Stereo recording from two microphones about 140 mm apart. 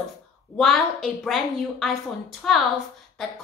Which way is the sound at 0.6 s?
Centre (ahead or behind).